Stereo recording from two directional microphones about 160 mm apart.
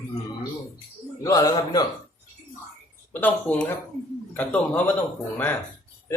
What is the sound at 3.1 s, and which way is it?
Speech, 10° left (ahead or behind).